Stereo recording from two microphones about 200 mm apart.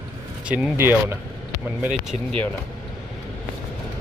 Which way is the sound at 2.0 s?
Centre (ahead or behind).